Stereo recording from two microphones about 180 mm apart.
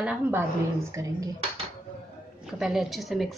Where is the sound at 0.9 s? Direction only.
20° right (ahead or behind).